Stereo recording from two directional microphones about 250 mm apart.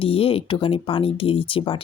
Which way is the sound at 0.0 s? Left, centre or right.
Left.